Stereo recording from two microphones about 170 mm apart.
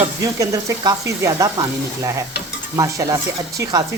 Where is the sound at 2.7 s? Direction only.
20° right (ahead or behind).